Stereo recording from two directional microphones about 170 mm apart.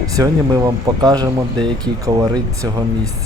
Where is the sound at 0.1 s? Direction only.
20° right (ahead or behind).